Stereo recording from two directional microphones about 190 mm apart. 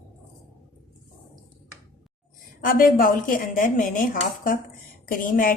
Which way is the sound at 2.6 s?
45° left (ahead or behind).